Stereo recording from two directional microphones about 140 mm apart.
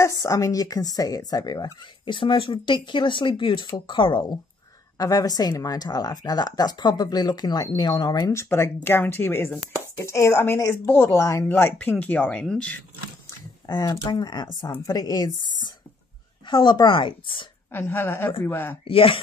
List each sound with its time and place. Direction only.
0.0 s speech: 20° left (ahead or behind)
13.7 s speech: 30° left (ahead or behind)
16.4 s speech: 35° left (ahead or behind)
17.6 s speech: 15° left (ahead or behind)
18.9 s speech: 40° left (ahead or behind)